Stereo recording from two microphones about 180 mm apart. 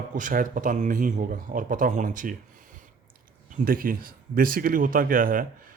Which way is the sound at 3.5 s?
50° right (ahead or behind).